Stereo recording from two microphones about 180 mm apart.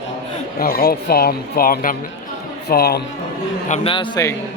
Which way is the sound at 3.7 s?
30° left (ahead or behind).